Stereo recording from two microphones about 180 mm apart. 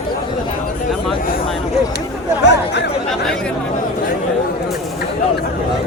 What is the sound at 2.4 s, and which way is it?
Chatter, 75° left (ahead or behind).